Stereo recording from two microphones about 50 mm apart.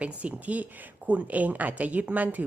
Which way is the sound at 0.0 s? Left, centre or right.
Right.